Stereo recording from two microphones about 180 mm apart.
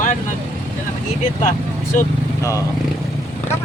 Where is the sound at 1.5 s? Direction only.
45° left (ahead or behind).